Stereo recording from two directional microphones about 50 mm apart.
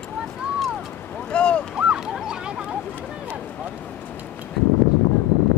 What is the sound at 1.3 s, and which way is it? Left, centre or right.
Boat, left.